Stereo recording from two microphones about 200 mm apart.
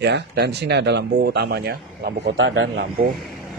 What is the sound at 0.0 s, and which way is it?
Speech, 55° right (ahead or behind).